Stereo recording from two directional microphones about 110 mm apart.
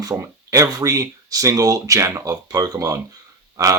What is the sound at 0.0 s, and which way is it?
Speech, 30° right (ahead or behind).